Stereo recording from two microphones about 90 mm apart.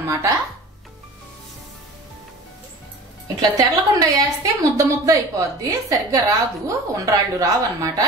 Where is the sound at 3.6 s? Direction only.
40° right (ahead or behind).